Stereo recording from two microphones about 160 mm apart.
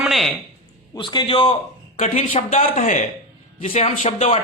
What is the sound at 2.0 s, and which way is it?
Speech, 50° left (ahead or behind).